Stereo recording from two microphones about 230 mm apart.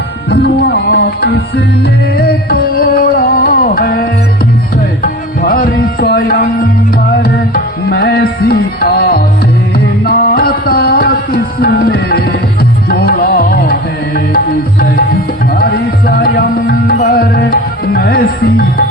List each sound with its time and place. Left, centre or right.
0.3 s music: left
5.4 s music: left
7.9 s music: left